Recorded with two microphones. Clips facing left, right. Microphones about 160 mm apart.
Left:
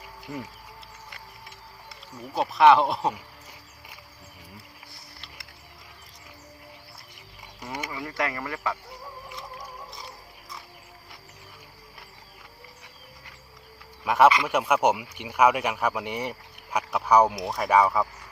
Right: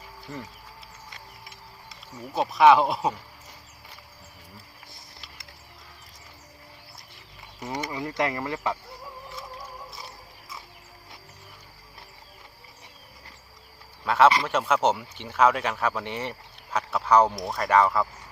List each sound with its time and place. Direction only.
2.3 s speech: centre (ahead or behind)
7.6 s speech: 20° right (ahead or behind)
14.0 s speech: 10° left (ahead or behind)
17.3 s speech: centre (ahead or behind)
17.7 s speech: 10° left (ahead or behind)